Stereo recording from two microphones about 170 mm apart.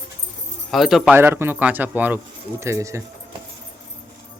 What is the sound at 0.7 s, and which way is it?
Speech, centre (ahead or behind).